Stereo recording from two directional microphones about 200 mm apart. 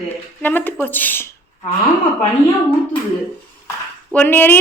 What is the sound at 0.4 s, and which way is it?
Speech, 10° left (ahead or behind).